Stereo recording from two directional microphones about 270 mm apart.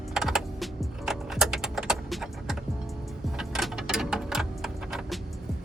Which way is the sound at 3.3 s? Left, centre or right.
Centre.